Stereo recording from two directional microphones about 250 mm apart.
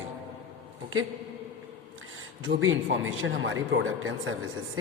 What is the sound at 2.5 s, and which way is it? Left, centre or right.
Speech, right.